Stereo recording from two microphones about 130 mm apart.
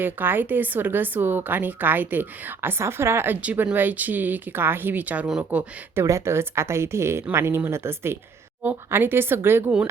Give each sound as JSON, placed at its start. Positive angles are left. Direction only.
{"t": 0.0, "sound": "a woman's voice", "side_deg": -15}